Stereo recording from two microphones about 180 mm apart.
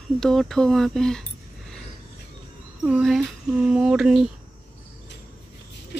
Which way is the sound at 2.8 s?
Centre (ahead or behind).